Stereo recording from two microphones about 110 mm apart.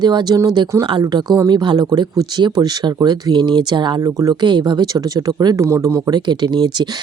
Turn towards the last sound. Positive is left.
turn(degrees=-40)  # may be behind; listen again after turning